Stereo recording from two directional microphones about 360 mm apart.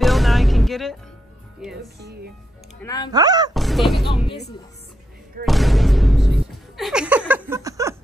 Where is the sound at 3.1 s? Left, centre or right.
Centre.